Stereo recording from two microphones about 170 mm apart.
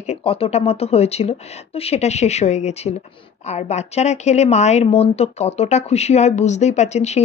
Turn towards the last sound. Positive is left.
turn(degrees=40)  # may be behind; listen again after turning